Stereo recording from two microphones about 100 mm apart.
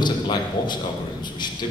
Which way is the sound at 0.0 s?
50° left (ahead or behind).